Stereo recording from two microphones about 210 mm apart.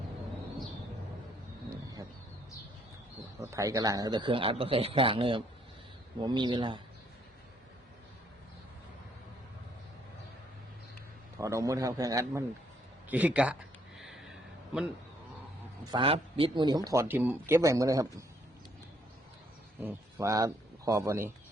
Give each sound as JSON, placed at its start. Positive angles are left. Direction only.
{"t": 3.4, "sound": "a man's voice", "side_deg": -15}
{"t": 11.3, "sound": "speech", "side_deg": -15}
{"t": 13.1, "sound": "a sound", "side_deg": -5}
{"t": 15.9, "sound": "a man's voice", "side_deg": -25}
{"t": 19.8, "sound": "a man's voice", "side_deg": -10}